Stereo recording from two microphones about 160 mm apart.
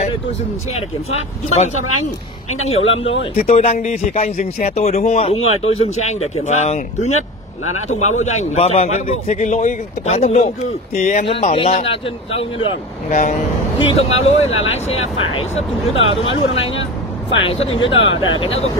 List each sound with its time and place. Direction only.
2.7 s speech: 40° left (ahead or behind)
11.5 s speech: 40° left (ahead or behind)
13.1 s speech: 55° left (ahead or behind)
13.7 s speech: 40° left (ahead or behind)